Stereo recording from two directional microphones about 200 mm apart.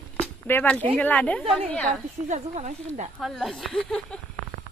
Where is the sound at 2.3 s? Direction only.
35° right (ahead or behind).